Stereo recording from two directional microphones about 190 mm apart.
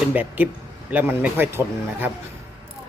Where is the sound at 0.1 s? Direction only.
10° right (ahead or behind).